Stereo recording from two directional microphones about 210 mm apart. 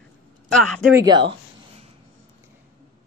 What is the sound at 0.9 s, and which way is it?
Speech, 20° right (ahead or behind).